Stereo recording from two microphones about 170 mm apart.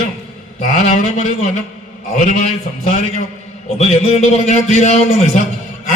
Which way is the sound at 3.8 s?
40° left (ahead or behind).